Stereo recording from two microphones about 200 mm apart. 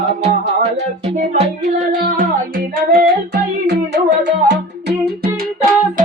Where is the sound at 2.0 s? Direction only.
45° right (ahead or behind).